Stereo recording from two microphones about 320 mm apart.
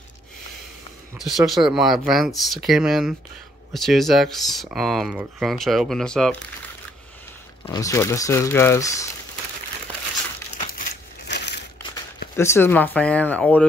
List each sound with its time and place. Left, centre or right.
1.1 s speech: centre
7.6 s speech: centre
10.6 s crushing: left
12.4 s speech: centre